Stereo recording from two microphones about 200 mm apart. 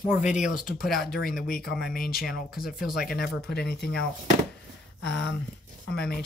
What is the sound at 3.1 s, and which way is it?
Speech, 50° left (ahead or behind).